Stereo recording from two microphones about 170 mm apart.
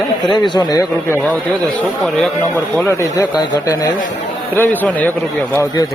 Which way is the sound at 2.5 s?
15° left (ahead or behind).